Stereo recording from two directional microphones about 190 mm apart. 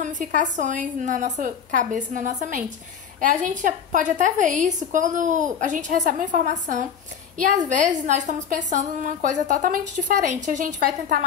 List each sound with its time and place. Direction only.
0.0 s a woman's voice: 40° right (ahead or behind)